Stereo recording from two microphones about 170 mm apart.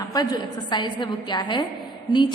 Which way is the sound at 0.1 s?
25° left (ahead or behind).